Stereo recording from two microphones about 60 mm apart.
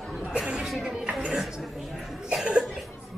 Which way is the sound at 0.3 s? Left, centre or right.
Centre.